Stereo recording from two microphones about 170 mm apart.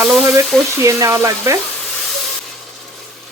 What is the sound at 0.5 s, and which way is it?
Speech, 5° left (ahead or behind).